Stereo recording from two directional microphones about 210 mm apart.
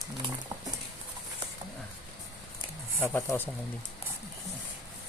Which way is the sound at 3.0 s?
10° left (ahead or behind).